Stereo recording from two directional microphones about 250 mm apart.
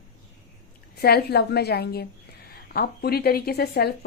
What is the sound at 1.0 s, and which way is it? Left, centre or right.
Speech, left.